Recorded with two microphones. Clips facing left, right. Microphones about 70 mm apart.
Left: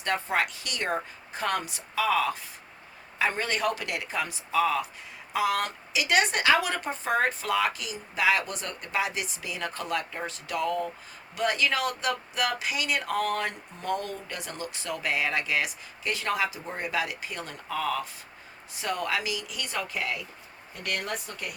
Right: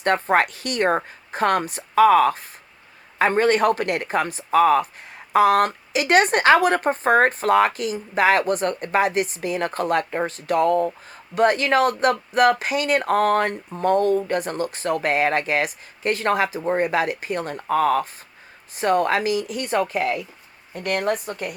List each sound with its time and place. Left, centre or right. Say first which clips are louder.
0.0 s speech: right 9 dB; right